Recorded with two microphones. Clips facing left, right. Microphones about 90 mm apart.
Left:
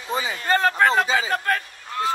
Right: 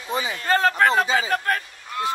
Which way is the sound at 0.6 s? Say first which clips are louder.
Even; 25° left (ahead or behind).